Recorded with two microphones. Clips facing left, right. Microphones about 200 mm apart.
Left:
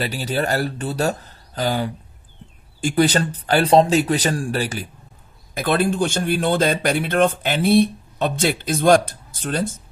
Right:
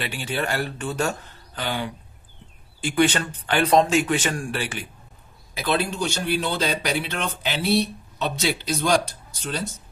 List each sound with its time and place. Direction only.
0.0 s speech: 40° left (ahead or behind)
5.5 s speech: 50° left (ahead or behind)